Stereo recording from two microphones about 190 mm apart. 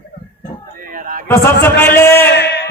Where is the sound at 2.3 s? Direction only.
65° left (ahead or behind).